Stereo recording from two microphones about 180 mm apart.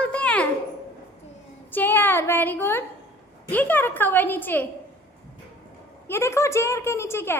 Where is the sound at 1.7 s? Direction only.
10° left (ahead or behind).